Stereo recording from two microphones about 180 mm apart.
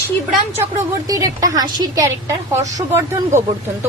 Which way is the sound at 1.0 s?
20° right (ahead or behind).